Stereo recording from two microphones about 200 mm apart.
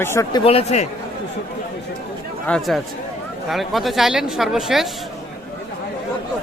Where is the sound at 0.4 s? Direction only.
30° left (ahead or behind).